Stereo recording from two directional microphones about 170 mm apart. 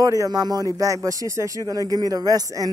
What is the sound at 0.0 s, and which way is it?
Speech, 20° right (ahead or behind).